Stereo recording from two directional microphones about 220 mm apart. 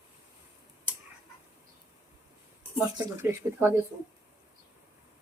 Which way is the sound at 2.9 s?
10° right (ahead or behind).